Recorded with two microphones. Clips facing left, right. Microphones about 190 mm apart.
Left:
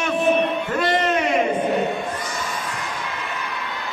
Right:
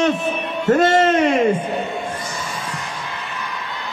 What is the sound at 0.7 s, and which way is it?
Speech, 45° right (ahead or behind).